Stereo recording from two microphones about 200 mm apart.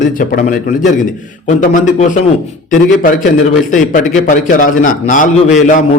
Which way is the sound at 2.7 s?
40° left (ahead or behind).